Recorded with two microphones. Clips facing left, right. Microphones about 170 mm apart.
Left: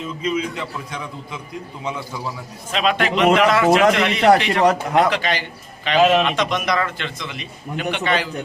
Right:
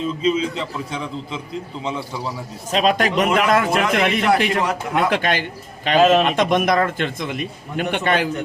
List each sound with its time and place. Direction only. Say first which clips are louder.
0.2 s a man's voice: right 1 dB; 25° right (ahead or behind)
2.7 s a man's voice: right 2 dB; 40° right (ahead or behind)
4.6 s speech: left 5 dB; 40° left (ahead or behind)
5.0 s a man's voice: right 1 dB; 50° right (ahead or behind)
6.0 s a man's voice: right 1 dB; centre (ahead or behind)
6.2 s a man's voice: right 4 dB; 50° right (ahead or behind)